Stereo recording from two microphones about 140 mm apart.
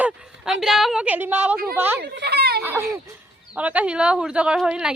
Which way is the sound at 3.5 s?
10° right (ahead or behind).